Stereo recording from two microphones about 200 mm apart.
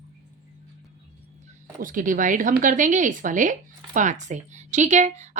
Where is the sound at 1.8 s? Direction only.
40° right (ahead or behind).